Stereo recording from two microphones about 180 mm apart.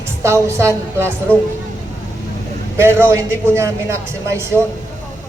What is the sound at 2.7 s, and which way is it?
A man's voice, 15° right (ahead or behind).